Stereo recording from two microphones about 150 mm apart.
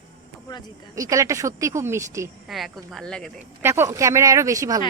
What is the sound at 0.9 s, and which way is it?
Speech, 20° right (ahead or behind).